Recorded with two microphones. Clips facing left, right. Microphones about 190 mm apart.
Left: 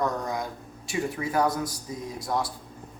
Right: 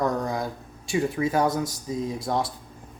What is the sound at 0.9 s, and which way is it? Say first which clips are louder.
Speech: right 4 dB; 25° right (ahead or behind).